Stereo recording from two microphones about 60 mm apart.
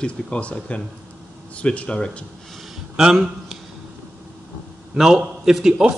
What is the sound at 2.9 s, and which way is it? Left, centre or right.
Speech, centre.